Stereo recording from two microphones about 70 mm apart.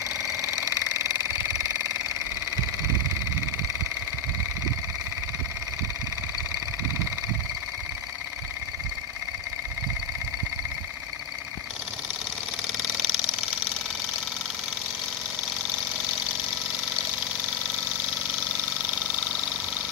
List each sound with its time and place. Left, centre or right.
0.7 s engine: right
12.7 s engine: centre